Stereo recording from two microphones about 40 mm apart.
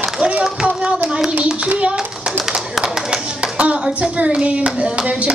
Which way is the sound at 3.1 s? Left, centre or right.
Right.